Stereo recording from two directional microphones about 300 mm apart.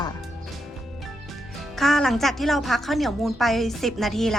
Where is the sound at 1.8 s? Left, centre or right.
Centre.